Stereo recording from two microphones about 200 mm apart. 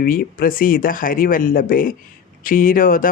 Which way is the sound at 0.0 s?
45° left (ahead or behind).